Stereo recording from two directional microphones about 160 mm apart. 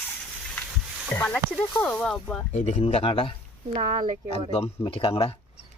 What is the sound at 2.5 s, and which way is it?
Speech, 45° left (ahead or behind).